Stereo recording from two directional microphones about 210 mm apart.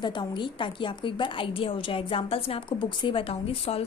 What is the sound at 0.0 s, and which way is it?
A woman's voice, 20° left (ahead or behind).